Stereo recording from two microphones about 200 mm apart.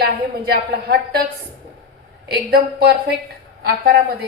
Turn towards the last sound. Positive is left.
turn(degrees=-50)  # may be behind; listen again after turning